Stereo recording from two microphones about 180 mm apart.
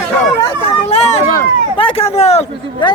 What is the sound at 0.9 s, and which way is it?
Run, 35° left (ahead or behind).